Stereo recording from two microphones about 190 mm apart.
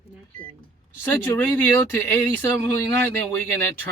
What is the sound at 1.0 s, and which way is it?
Speech, 15° left (ahead or behind).